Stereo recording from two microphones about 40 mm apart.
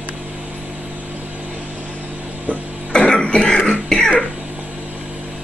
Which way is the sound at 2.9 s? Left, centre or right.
Left.